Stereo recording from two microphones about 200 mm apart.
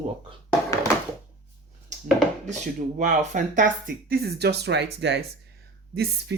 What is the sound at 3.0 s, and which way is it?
Speech, 40° right (ahead or behind).